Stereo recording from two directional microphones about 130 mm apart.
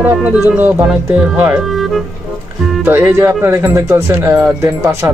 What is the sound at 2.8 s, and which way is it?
Speech, 15° right (ahead or behind).